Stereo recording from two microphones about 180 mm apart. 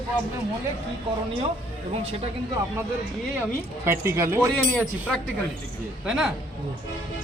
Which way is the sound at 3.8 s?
15° right (ahead or behind).